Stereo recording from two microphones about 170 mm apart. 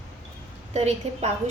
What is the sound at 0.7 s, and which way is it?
Speech, 40° right (ahead or behind).